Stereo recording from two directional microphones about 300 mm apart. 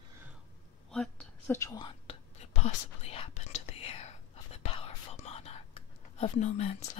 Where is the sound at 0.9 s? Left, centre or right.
Centre.